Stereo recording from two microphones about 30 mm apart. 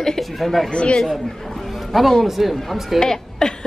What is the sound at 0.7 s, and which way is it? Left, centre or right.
Speech, left.